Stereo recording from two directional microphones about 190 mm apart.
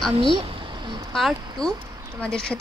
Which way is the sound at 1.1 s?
Centre (ahead or behind).